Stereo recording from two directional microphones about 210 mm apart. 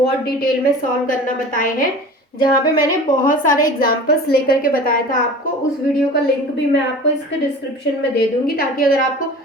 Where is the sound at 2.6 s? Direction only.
40° left (ahead or behind).